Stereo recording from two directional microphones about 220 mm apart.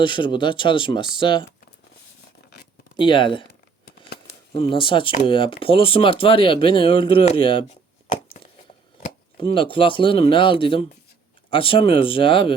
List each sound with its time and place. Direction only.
0.0 s speech: 20° left (ahead or behind)
3.0 s speech: 20° left (ahead or behind)
9.0 s speech: 30° left (ahead or behind)